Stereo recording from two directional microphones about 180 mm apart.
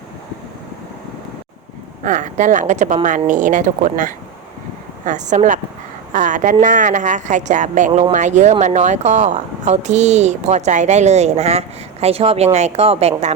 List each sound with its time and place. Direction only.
2.0 s a woman's voice: 45° right (ahead or behind)